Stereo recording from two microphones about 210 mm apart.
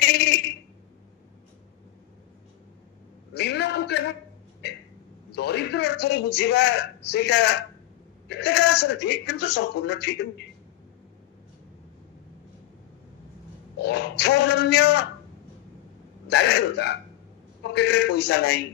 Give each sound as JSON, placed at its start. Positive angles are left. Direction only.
{"t": 3.3, "sound": "a man's voice", "side_deg": 55}
{"t": 13.8, "sound": "a man's voice", "side_deg": 50}
{"t": 16.3, "sound": "a man's voice", "side_deg": 55}